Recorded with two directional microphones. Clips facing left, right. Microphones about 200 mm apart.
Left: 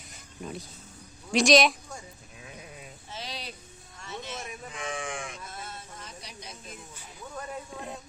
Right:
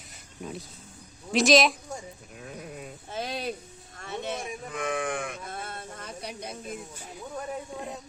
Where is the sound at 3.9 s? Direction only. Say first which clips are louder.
Right 5 dB; 60° right (ahead or behind).